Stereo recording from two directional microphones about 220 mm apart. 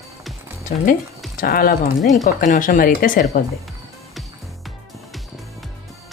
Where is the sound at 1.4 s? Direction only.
40° left (ahead or behind).